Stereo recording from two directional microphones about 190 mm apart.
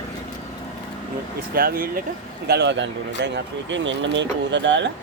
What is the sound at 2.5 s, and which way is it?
A man's voice, 65° right (ahead or behind).